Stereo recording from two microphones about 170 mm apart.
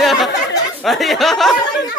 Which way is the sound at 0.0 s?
Centre (ahead or behind).